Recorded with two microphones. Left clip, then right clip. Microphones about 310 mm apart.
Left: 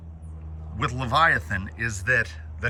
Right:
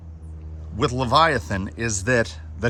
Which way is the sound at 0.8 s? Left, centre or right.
Centre.